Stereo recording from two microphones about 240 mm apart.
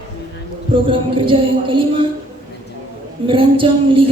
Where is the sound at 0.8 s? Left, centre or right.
Right.